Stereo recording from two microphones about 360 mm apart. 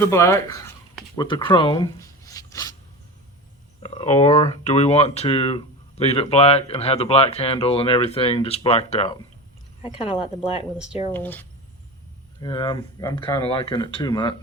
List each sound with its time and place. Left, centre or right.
0.0 s speech: centre
3.8 s speech: centre
11.1 s speech: centre